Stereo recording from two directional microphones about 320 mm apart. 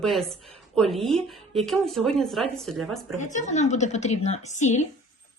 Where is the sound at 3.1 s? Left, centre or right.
Left.